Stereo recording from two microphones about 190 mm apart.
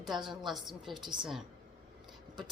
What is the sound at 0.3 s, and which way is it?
A woman's voice, centre (ahead or behind).